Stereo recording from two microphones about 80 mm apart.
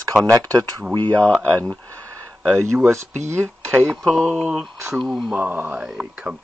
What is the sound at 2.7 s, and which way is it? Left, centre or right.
Speech, right.